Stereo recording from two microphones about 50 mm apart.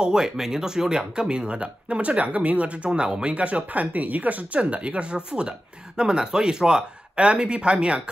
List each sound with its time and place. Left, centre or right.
0.0 s speech: centre